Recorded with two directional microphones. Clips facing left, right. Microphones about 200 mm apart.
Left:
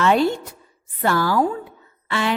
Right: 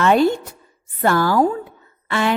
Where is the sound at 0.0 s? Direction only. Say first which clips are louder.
Right 3 dB; 50° right (ahead or behind).